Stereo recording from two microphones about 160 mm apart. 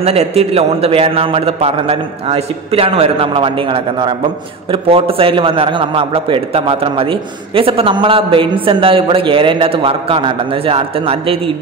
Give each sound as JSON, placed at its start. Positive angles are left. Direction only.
{"t": 0.0, "sound": "a man's voice", "side_deg": -40}